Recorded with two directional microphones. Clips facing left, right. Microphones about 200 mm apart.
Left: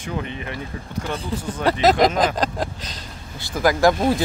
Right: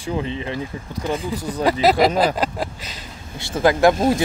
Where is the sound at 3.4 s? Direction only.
25° right (ahead or behind).